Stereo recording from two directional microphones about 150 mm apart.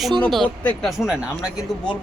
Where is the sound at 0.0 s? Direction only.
Centre (ahead or behind).